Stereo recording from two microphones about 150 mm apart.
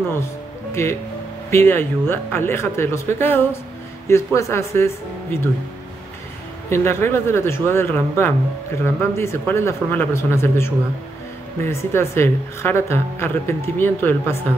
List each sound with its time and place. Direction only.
0.8 s speech: 20° left (ahead or behind)
6.7 s speech: 15° left (ahead or behind)